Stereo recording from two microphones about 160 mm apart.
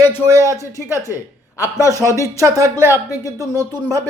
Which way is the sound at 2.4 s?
20° right (ahead or behind).